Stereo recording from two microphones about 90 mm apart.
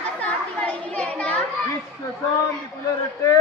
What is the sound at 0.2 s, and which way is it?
Children playing, 15° left (ahead or behind).